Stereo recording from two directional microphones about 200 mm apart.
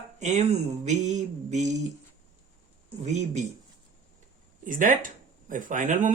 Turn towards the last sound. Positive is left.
turn(degrees=-40)  # may be behind; listen again after turning